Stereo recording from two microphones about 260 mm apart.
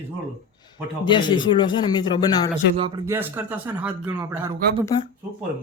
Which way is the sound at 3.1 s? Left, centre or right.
Centre.